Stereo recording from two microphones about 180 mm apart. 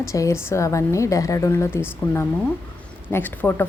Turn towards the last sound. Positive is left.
turn(degrees=10)  # may be behind; listen again after turning